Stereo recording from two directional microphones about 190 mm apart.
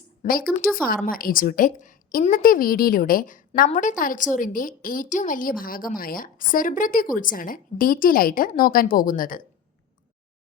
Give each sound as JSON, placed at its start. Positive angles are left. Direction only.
{"t": 0.2, "sound": "a woman's voice", "side_deg": 50}